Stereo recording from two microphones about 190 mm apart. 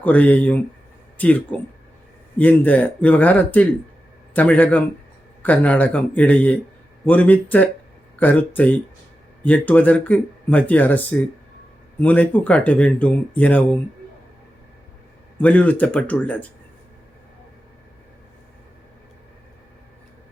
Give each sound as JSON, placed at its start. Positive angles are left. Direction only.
{"t": 0.0, "sound": "speech", "side_deg": 10}
{"t": 15.4, "sound": "speech", "side_deg": 10}